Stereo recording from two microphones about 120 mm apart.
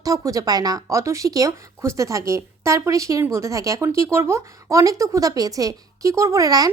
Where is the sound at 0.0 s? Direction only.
30° right (ahead or behind).